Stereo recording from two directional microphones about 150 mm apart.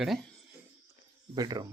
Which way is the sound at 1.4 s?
25° right (ahead or behind).